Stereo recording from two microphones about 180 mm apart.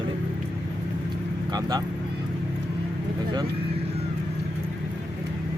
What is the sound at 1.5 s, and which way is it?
Speech, 20° right (ahead or behind).